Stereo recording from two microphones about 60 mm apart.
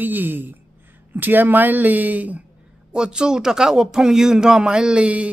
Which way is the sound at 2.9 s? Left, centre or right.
Centre.